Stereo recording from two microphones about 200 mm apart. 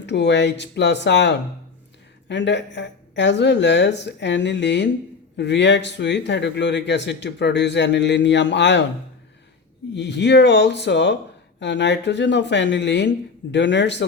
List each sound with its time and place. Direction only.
0.0 s speech: 60° left (ahead or behind)
9.9 s speech: 60° left (ahead or behind)